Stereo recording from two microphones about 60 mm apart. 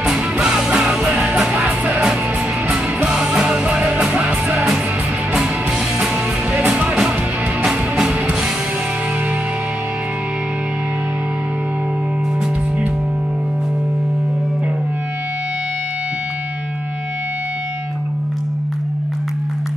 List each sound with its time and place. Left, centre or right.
0.0 s music: centre
3.1 s music: centre
6.5 s music: centre